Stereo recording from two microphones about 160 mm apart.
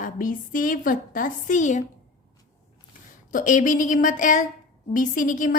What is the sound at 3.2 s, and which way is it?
A woman's voice, 55° left (ahead or behind).